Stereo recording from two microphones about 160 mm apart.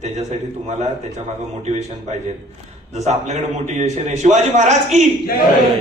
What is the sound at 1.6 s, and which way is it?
A man's voice, 45° right (ahead or behind).